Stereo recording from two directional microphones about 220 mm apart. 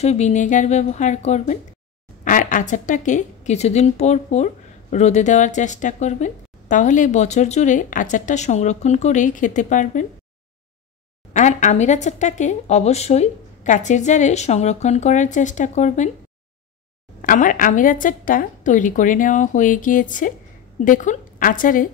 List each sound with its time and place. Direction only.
0.0 s speech: 30° left (ahead or behind)
11.3 s speech: 35° left (ahead or behind)
17.2 s speech: 40° left (ahead or behind)